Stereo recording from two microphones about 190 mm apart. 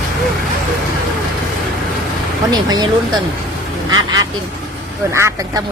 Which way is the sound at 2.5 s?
20° right (ahead or behind).